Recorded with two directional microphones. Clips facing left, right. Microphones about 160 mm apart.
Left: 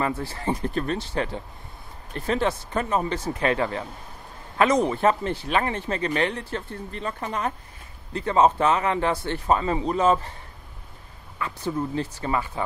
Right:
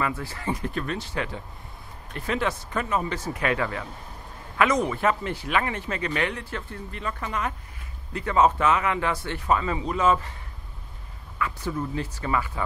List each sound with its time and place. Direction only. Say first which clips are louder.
0.0 s speech: left 2 dB; 30° left (ahead or behind)
11.3 s speech: left 1 dB; 30° left (ahead or behind)